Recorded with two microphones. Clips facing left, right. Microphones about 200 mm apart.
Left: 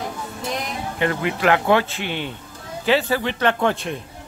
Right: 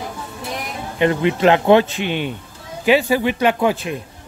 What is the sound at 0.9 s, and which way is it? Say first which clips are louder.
Speech: right 6 dB; 20° right (ahead or behind).